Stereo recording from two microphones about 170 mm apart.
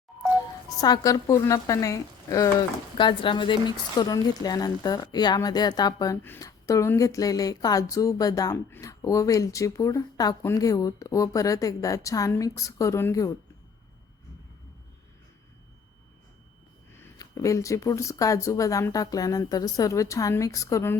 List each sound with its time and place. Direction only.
0.8 s a woman's voice: 20° left (ahead or behind)
3.0 s a woman's voice: 30° left (ahead or behind)
16.9 s a woman's voice: 15° left (ahead or behind)